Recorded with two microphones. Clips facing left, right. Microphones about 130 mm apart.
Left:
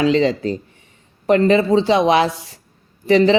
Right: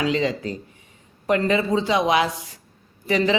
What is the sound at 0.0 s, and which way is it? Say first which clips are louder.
A man's voice: left 7 dB; 30° left (ahead or behind).